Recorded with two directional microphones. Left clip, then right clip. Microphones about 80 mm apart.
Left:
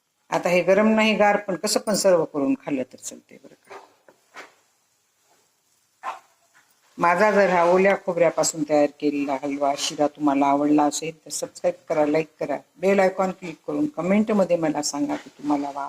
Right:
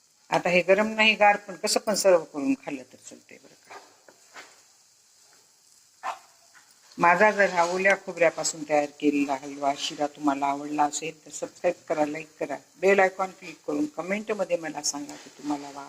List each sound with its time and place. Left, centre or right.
0.3 s speech: left
4.0 s a sound: left
6.0 s dog: left
6.9 s speech: left